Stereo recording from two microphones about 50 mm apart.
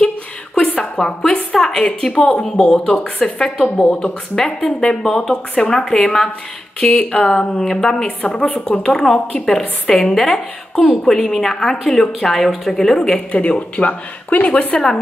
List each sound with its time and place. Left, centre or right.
0.6 s a sound: centre
2.6 s a woman's voice: centre
3.7 s a woman's voice: left
6.9 s a woman's voice: left; by 13.2 s centre
13.3 s a woman's voice: left